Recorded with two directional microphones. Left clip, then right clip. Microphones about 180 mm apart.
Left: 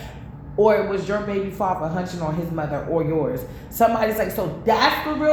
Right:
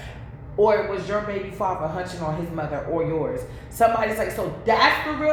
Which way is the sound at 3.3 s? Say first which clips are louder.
Left 1 dB; 35° left (ahead or behind).